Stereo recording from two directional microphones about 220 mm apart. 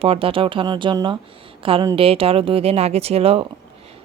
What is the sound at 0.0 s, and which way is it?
Speech, 25° right (ahead or behind).